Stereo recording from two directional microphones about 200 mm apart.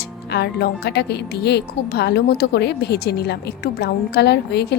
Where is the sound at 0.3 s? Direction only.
55° left (ahead or behind).